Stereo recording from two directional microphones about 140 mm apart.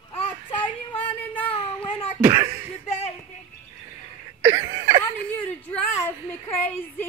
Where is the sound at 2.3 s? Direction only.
30° right (ahead or behind).